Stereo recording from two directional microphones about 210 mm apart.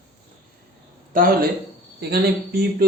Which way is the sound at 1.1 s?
40° right (ahead or behind).